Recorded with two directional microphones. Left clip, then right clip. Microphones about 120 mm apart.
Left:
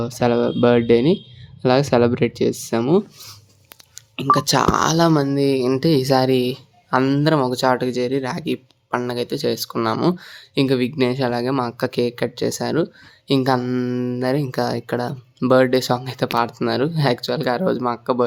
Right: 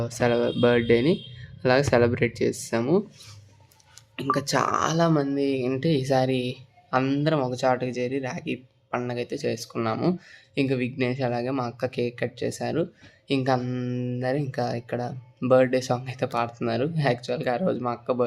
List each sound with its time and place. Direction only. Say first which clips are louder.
0.0 s speech: left 5 dB; 45° left (ahead or behind)
4.5 s speech: left 6 dB; 70° left (ahead or behind)
5.1 s speech: left 6 dB; 35° left (ahead or behind)
7.0 s speech: left 8 dB; 35° left (ahead or behind)
13.6 s speech: left 8 dB; 35° left (ahead or behind)